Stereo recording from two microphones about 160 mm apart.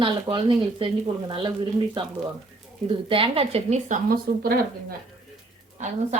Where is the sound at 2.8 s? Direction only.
35° right (ahead or behind); by 4.6 s 65° right (ahead or behind).